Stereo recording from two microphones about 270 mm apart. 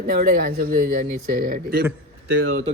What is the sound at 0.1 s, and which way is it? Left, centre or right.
Speech, right.